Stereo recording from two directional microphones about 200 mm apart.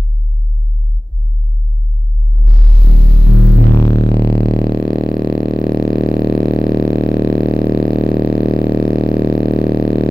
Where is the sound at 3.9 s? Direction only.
20° left (ahead or behind).